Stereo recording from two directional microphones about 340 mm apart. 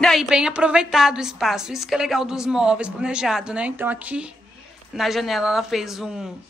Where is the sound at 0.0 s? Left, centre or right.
Centre.